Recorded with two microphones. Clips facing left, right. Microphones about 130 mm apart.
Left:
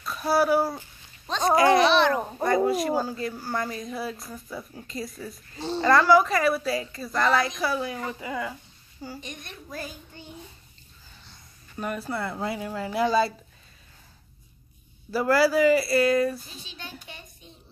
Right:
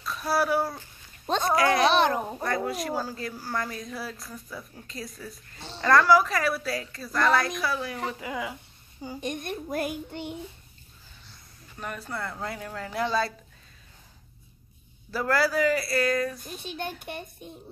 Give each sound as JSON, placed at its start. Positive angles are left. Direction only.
{"t": 0.0, "sound": "a woman's voice", "side_deg": 0}
{"t": 1.9, "sound": "a child's voice", "side_deg": -45}
{"t": 2.4, "sound": "a woman's voice", "side_deg": 0}
{"t": 9.2, "sound": "a child's voice", "side_deg": -50}
{"t": 11.8, "sound": "speech", "side_deg": 5}
{"t": 15.0, "sound": "a woman's voice", "side_deg": 5}
{"t": 16.4, "sound": "a child's voice", "side_deg": -55}